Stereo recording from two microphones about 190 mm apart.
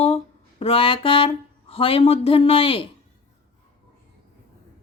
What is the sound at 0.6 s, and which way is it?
Speech, 30° left (ahead or behind).